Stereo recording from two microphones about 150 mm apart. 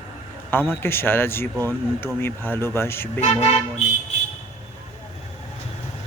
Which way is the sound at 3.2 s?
45° left (ahead or behind).